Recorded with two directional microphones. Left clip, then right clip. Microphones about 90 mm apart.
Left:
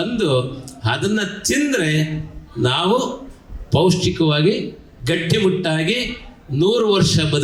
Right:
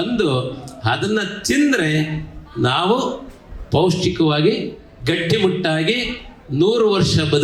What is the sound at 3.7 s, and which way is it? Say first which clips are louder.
A man's voice: even; 15° right (ahead or behind).